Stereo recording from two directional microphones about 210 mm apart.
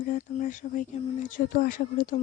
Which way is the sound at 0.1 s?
35° left (ahead or behind).